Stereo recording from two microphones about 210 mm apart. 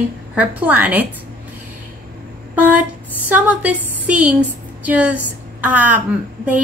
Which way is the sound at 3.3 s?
5° right (ahead or behind).